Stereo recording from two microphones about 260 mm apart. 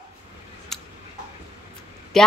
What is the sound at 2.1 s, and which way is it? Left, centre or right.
Speech, centre.